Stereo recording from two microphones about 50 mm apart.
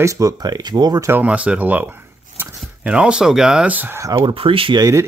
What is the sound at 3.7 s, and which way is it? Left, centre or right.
Speech, right.